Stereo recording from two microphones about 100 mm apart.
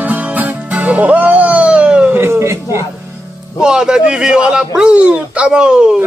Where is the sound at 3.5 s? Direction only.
10° right (ahead or behind).